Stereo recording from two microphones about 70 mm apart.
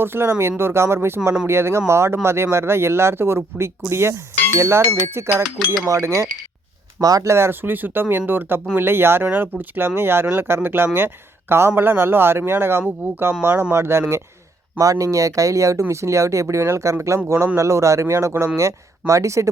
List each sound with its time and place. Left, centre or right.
0.0 s speech: right
5.4 s speech: centre
5.8 s speech: right
14.8 s speech: right